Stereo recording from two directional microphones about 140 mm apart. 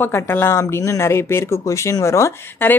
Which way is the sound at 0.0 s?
15° left (ahead or behind).